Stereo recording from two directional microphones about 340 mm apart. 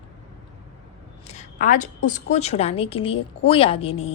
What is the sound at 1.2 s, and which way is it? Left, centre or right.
A woman's voice, left.